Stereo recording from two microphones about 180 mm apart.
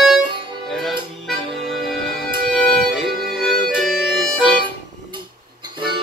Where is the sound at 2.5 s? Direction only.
5° left (ahead or behind).